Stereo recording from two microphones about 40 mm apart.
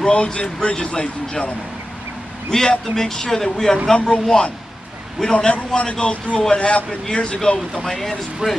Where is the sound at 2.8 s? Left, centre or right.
Centre.